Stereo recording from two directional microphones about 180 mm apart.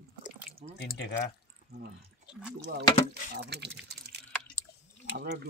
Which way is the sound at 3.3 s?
70° right (ahead or behind).